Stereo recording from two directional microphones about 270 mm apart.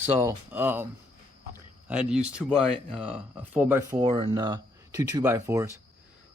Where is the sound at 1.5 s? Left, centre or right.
Centre.